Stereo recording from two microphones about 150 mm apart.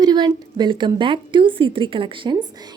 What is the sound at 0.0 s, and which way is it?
A woman's voice, 30° right (ahead or behind).